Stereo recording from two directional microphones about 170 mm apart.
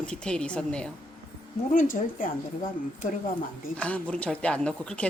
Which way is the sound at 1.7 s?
50° left (ahead or behind).